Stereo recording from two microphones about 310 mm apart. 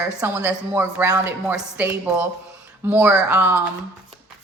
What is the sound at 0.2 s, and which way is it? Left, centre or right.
A woman's voice, centre.